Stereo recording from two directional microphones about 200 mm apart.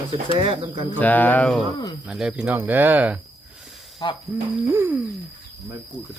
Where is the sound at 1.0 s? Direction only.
10° left (ahead or behind); by 3.1 s 10° right (ahead or behind).